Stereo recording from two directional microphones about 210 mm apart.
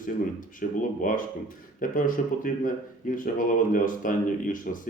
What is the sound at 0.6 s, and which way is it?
Speech, 40° left (ahead or behind).